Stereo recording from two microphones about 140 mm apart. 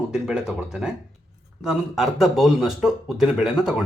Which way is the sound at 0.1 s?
5° right (ahead or behind).